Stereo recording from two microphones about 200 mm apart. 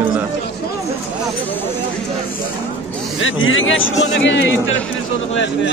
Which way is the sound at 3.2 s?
75° left (ahead or behind).